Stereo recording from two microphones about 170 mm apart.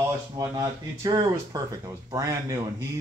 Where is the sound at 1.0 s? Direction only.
20° right (ahead or behind).